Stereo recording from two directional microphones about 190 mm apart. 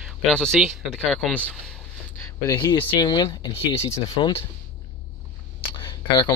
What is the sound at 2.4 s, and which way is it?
Speech, 25° left (ahead or behind).